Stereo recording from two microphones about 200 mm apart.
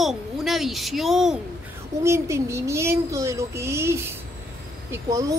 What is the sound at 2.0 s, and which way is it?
Speech, 15° right (ahead or behind).